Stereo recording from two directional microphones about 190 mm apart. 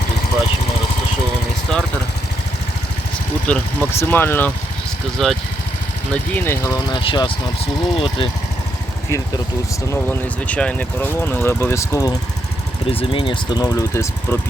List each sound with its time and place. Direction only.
3.4 s speech: 5° left (ahead or behind); by 8.3 s 25° left (ahead or behind)
9.9 s speech: 10° left (ahead or behind)
12.9 s speech: 30° left (ahead or behind)